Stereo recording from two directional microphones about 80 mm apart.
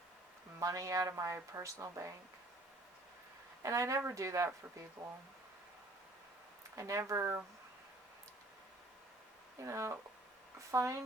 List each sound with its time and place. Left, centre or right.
0.6 s speech: right
3.6 s speech: right
6.7 s speech: right
9.6 s speech: right